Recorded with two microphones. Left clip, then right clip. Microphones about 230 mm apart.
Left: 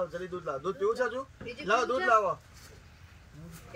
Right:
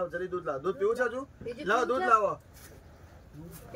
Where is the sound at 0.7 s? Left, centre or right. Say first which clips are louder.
Even; centre.